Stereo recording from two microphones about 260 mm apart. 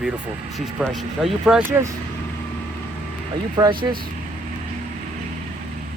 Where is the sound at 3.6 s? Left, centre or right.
Centre.